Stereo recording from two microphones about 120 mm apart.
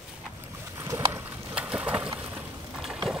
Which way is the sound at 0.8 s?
25° right (ahead or behind).